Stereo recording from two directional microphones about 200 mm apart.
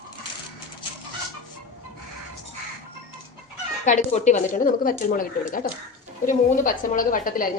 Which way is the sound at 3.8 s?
35° left (ahead or behind).